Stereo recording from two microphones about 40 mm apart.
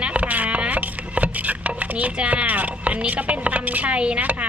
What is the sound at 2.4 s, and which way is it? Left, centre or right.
A woman's voice, right.